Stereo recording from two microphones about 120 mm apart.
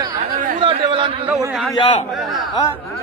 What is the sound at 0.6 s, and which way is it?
Speech, 45° right (ahead or behind).